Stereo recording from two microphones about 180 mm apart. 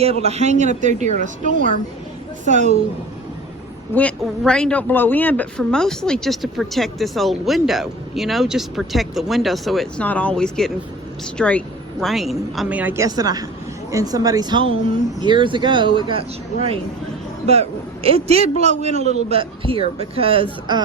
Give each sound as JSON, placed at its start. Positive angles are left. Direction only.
{"t": 0.0, "sound": "a man's voice", "side_deg": -35}
{"t": 2.4, "sound": "a man's voice", "side_deg": -40}
{"t": 3.9, "sound": "speech", "side_deg": 5}
{"t": 17.4, "sound": "a man's voice", "side_deg": -35}